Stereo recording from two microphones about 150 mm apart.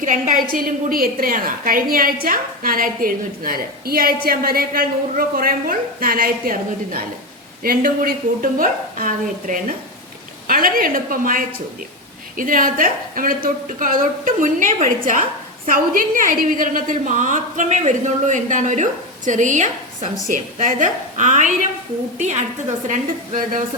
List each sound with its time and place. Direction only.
0.0 s a woman's voice: 60° right (ahead or behind)
0.5 s a woman's voice: 75° right (ahead or behind)
10.4 s a woman's voice: 75° right (ahead or behind)